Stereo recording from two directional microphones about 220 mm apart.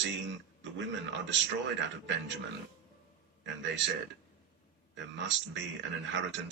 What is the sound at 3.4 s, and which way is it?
Speech, 55° right (ahead or behind).